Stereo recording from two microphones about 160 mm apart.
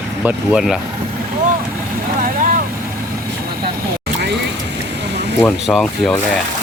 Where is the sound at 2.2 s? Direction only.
60° right (ahead or behind).